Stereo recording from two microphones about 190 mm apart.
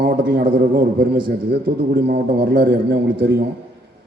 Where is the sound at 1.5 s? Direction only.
50° right (ahead or behind).